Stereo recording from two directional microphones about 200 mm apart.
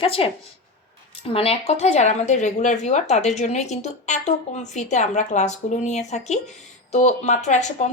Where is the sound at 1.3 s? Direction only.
30° left (ahead or behind).